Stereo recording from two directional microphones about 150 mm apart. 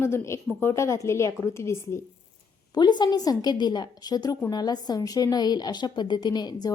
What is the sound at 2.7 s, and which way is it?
A woman's voice, 30° left (ahead or behind).